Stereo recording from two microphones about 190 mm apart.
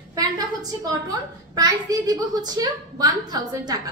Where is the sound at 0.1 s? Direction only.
20° right (ahead or behind).